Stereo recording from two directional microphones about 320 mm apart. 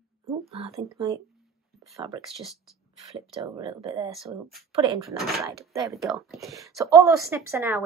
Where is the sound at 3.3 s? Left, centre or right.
Centre.